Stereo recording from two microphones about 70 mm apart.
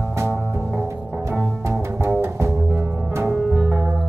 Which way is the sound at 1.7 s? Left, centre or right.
Right.